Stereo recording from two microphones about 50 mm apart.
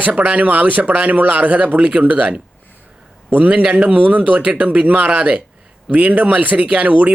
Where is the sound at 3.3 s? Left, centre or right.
Right.